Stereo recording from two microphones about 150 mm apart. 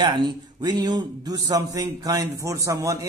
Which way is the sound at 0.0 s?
30° right (ahead or behind).